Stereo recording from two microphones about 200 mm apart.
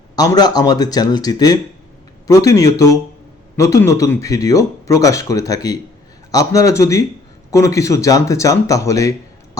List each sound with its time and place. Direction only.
0.2 s a man's voice: 20° left (ahead or behind)